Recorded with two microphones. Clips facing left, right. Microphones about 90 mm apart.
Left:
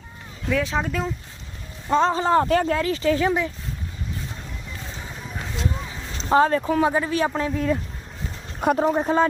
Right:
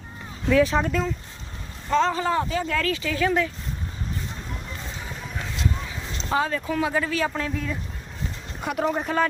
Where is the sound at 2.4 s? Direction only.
60° left (ahead or behind).